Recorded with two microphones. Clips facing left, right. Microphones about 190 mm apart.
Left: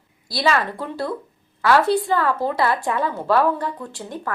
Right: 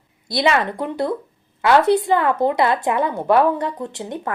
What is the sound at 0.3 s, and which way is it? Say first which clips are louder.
Speech: right 2 dB; 20° right (ahead or behind).